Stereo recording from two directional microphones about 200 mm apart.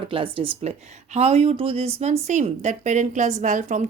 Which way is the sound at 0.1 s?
25° right (ahead or behind).